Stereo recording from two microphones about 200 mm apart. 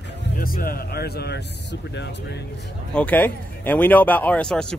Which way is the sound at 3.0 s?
10° left (ahead or behind).